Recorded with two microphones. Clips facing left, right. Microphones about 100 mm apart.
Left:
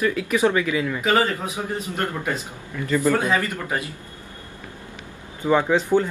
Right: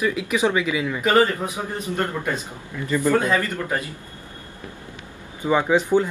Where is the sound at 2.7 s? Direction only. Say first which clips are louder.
Even; 15° right (ahead or behind).